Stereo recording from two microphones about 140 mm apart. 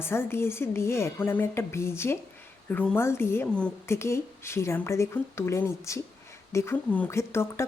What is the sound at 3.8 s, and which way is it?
A woman's voice, 20° left (ahead or behind).